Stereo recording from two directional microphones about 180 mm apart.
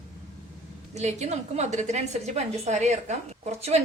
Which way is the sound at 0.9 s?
40° right (ahead or behind).